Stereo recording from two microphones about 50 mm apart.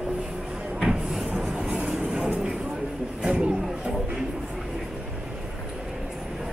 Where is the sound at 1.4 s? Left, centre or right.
Centre.